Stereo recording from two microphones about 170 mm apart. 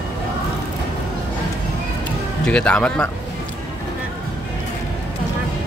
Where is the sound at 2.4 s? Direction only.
5° left (ahead or behind).